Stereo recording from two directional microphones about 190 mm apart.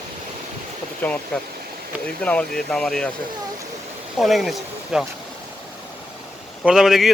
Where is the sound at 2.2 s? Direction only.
5° left (ahead or behind).